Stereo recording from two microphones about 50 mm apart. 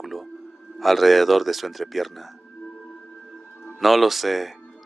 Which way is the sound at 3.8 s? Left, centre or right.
Centre.